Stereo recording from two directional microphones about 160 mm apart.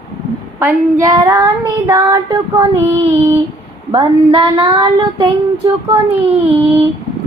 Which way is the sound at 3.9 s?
35° right (ahead or behind).